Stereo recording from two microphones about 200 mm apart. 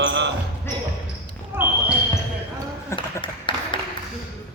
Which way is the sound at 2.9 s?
25° left (ahead or behind).